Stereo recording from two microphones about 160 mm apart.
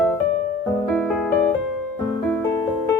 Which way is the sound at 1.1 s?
5° left (ahead or behind).